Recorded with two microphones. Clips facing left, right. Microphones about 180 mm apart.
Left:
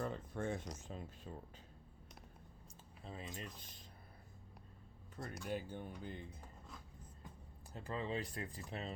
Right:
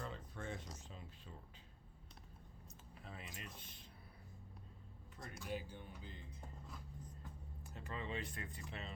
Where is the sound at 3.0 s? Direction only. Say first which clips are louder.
Left 5 dB; 30° left (ahead or behind).